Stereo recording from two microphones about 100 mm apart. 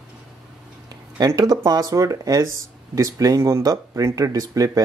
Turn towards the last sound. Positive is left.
turn(degrees=-35)  # may be behind; listen again after turning